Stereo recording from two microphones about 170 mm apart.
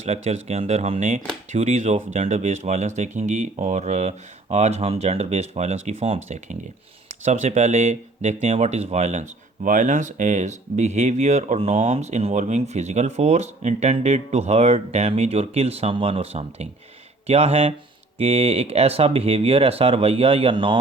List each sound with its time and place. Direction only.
0.0 s speech: 40° right (ahead or behind)